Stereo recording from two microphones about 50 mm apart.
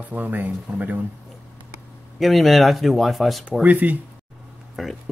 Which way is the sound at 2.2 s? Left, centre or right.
Centre.